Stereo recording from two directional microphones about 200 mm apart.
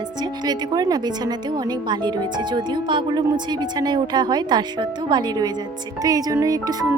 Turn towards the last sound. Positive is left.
turn(degrees=-20)  # may be behind; listen again after turning